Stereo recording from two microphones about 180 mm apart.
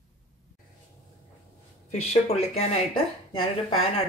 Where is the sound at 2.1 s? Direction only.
35° left (ahead or behind).